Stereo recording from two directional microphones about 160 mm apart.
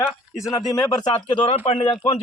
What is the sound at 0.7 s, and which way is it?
A man's voice, 25° left (ahead or behind).